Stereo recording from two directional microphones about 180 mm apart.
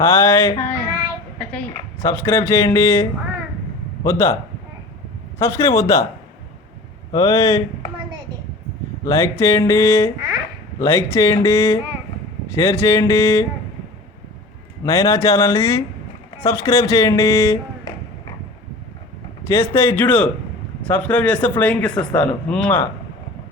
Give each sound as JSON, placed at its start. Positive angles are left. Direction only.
{"t": 0.0, "sound": "speech", "side_deg": 15}
{"t": 5.4, "sound": "speech", "side_deg": 15}
{"t": 7.1, "sound": "speech", "side_deg": 20}
{"t": 9.0, "sound": "speech", "side_deg": 15}
{"t": 14.8, "sound": "speech", "side_deg": 15}
{"t": 19.5, "sound": "speech", "side_deg": 15}